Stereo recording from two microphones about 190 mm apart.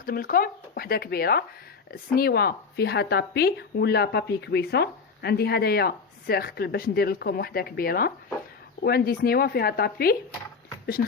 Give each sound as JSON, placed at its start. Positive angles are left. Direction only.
{"t": 0.0, "sound": "speech", "side_deg": 50}